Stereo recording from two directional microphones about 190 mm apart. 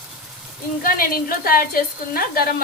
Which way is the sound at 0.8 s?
50° left (ahead or behind).